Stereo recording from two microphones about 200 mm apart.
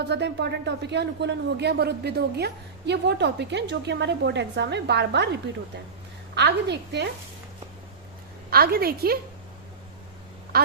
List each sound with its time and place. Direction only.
0.0 s speech: 60° right (ahead or behind)
8.4 s a woman's voice: 50° right (ahead or behind)